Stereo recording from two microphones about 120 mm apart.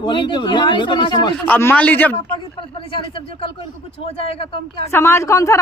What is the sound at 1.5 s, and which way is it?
Speech, 15° left (ahead or behind).